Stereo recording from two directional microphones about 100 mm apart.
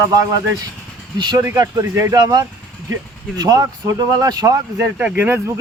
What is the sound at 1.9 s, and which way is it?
Speech, 30° right (ahead or behind).